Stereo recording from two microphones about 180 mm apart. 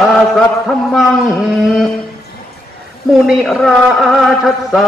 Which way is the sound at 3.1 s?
Centre (ahead or behind).